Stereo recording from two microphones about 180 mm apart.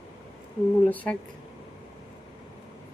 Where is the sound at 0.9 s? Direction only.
10° left (ahead or behind).